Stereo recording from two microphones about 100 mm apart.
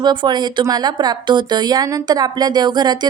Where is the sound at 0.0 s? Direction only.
50° right (ahead or behind).